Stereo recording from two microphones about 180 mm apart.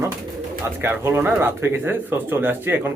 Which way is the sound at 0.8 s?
10° right (ahead or behind).